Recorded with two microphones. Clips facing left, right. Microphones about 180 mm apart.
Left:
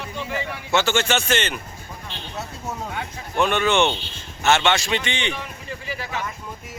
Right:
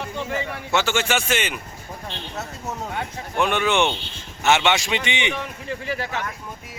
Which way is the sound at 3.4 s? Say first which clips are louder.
Left 1 dB; 10° right (ahead or behind).